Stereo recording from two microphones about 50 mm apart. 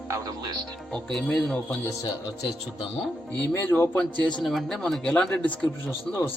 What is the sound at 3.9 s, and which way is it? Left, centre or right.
Speech, centre.